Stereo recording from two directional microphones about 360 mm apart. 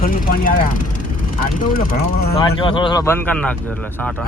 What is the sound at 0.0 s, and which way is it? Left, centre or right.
A man's voice, left.